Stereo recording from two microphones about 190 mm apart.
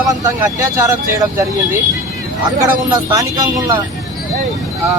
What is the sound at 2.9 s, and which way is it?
Speech, 20° right (ahead or behind).